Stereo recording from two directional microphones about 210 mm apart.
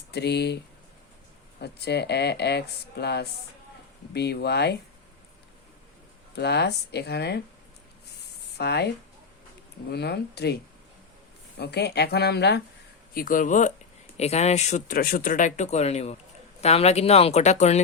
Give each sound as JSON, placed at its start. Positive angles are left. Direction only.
{"t": 0.1, "sound": "speech", "side_deg": 50}
{"t": 6.3, "sound": "speech", "side_deg": 50}
{"t": 8.5, "sound": "speech", "side_deg": 55}
{"t": 9.9, "sound": "speech", "side_deg": 50}
{"t": 13.1, "sound": "speech", "side_deg": 40}